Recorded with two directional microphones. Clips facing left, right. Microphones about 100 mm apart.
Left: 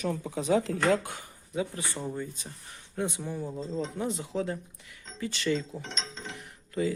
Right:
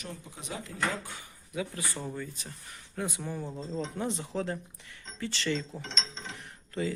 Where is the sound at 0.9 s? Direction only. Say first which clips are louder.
Left 9 dB; 50° left (ahead or behind).